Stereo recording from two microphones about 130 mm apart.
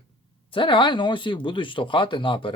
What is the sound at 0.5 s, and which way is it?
Speech, 40° left (ahead or behind).